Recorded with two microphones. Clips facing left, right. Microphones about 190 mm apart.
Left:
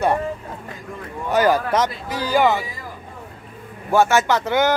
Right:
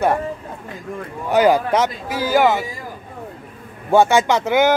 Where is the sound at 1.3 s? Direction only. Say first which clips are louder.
Right 3 dB; 10° right (ahead or behind).